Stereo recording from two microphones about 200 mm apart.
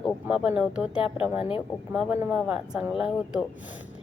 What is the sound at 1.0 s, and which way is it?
Speech, 25° left (ahead or behind).